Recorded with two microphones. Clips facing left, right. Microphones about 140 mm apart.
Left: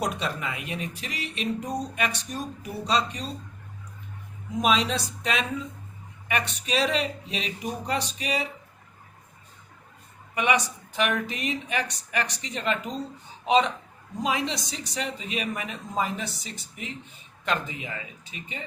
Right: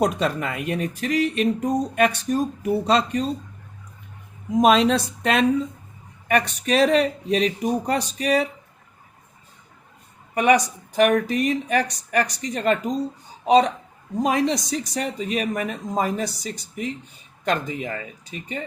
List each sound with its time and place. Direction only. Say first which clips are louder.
0.2 s speech: right 7 dB; 50° right (ahead or behind)
4.6 s speech: right 8 dB; 50° right (ahead or behind)
10.3 s speech: right 7 dB; 40° right (ahead or behind)